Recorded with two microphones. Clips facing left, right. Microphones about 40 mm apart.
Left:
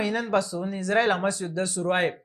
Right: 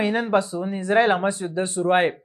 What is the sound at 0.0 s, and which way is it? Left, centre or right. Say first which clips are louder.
Speech: right 4 dB; right.